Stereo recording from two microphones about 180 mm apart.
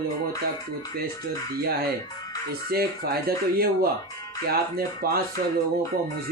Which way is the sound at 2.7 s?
60° right (ahead or behind).